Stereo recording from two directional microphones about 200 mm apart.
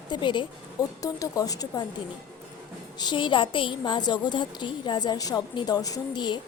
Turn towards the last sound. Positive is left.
turn(degrees=20)  # may be behind; listen again after turning